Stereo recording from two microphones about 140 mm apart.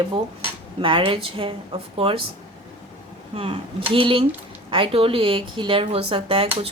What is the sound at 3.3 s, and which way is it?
A woman's voice, 40° right (ahead or behind).